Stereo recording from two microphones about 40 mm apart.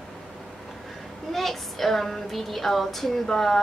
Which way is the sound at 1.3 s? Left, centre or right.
Centre.